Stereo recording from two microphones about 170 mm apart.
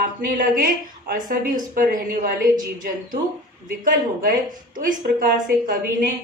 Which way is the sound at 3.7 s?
55° right (ahead or behind).